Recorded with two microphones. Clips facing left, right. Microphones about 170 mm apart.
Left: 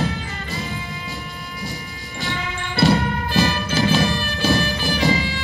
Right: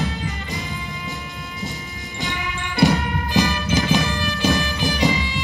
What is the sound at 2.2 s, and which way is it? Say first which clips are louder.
Music: left 1 dB; 15° right (ahead or behind).